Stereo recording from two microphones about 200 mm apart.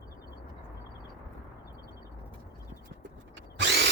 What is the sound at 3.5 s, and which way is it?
Drill, 60° right (ahead or behind).